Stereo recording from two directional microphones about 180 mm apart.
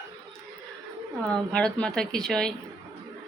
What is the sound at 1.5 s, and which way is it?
Speech, 5° left (ahead or behind).